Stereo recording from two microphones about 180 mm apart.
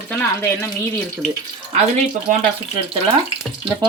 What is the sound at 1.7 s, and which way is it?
Speech, 40° right (ahead or behind).